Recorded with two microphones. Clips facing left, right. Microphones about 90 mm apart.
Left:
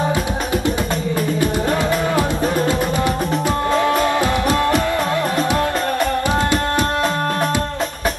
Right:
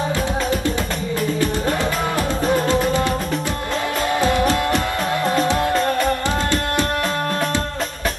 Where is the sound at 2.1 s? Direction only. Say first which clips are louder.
Left 1 dB; 15° left (ahead or behind).